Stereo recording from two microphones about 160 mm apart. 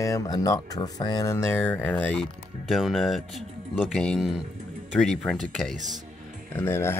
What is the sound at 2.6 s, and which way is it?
Speech, centre (ahead or behind).